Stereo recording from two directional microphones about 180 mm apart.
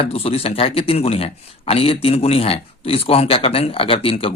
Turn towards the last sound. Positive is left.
turn(degrees=30)  # may be behind; listen again after turning